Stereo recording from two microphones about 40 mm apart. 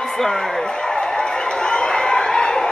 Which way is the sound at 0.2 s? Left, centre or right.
Centre.